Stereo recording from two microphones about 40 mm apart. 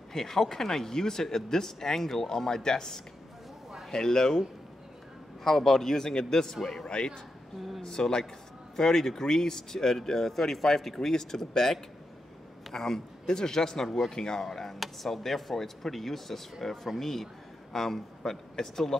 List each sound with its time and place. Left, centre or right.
0.1 s speech: centre
5.4 s speech: centre